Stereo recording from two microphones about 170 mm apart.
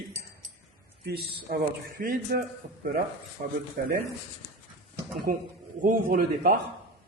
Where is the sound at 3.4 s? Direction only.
55° right (ahead or behind).